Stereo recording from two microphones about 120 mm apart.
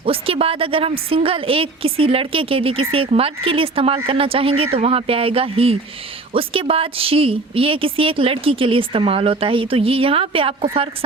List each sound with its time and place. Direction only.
0.0 s a woman's voice: 50° right (ahead or behind)